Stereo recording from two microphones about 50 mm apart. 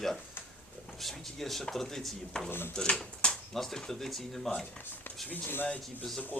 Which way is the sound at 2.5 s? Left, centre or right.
Left.